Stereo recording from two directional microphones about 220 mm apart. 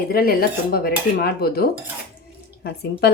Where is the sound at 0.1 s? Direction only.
40° left (ahead or behind).